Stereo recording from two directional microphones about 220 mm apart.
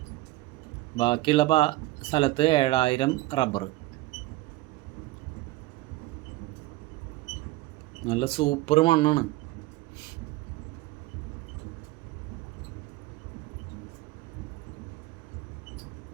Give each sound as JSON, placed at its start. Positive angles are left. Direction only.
{"t": 0.9, "sound": "speech", "side_deg": 25}
{"t": 8.0, "sound": "speech", "side_deg": 25}